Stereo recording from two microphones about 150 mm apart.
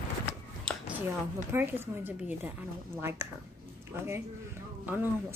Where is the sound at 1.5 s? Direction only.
15° right (ahead or behind).